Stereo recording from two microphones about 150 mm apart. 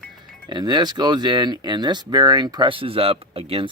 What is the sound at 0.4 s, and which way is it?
Speech, 30° right (ahead or behind).